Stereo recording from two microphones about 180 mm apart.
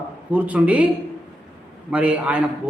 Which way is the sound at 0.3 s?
10° right (ahead or behind).